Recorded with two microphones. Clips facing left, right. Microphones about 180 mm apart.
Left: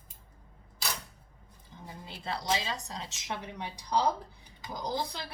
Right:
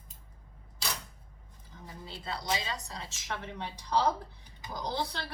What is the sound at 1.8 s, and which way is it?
A woman's voice, 25° left (ahead or behind).